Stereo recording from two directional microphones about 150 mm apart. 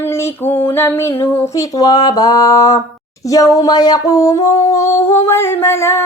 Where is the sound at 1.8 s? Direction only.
25° left (ahead or behind).